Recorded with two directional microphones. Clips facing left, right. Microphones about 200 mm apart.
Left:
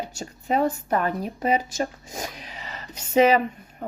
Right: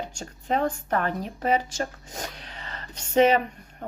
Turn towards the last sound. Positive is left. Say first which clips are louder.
# left 1 dB
turn(degrees=10)  # may be behind; listen again after turning